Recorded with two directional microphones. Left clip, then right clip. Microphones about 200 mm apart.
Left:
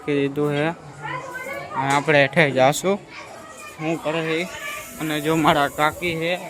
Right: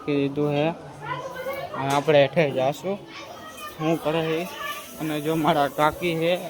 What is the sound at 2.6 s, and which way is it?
Speech, 30° left (ahead or behind).